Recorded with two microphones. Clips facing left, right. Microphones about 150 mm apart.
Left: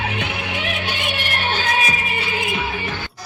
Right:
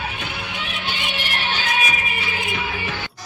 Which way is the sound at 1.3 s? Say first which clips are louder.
Left 3 dB; 45° left (ahead or behind).